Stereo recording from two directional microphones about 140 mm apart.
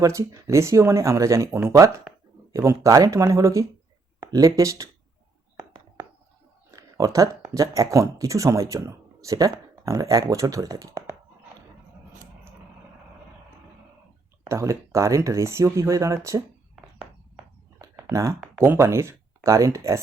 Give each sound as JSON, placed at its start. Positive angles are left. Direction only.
{"t": 0.0, "sound": "speech", "side_deg": -20}
{"t": 6.7, "sound": "speech", "side_deg": -25}
{"t": 14.4, "sound": "speech", "side_deg": -20}
{"t": 17.7, "sound": "a sound", "side_deg": -20}
{"t": 18.3, "sound": "speech", "side_deg": -15}